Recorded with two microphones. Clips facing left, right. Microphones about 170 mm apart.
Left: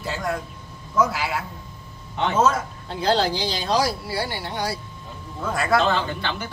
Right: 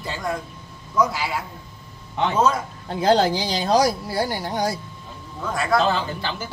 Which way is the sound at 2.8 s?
45° right (ahead or behind).